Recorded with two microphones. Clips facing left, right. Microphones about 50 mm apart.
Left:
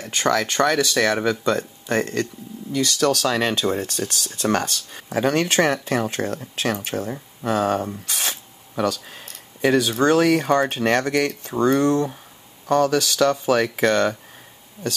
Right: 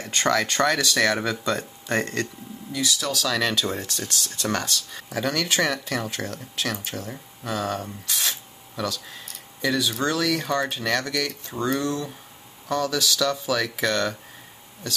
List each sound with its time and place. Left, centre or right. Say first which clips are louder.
0.1 s speech: left 2 dB; centre
2.7 s speech: left 6 dB; left
3.3 s speech: left 3 dB; left
7.4 s speech: left 7 dB; left